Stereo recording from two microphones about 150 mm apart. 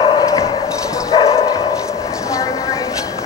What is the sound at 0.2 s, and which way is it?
Bow-wow, 30° left (ahead or behind).